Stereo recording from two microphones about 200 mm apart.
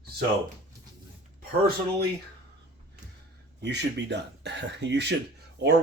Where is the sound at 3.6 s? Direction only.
55° right (ahead or behind).